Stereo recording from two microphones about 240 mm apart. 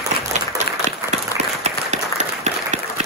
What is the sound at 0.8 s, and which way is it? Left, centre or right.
Applause, right.